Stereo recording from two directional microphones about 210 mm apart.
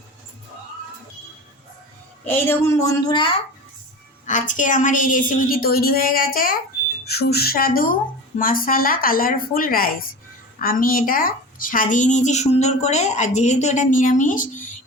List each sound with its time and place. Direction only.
2.2 s a woman's voice: 10° left (ahead or behind)
4.3 s a woman's voice: 35° left (ahead or behind)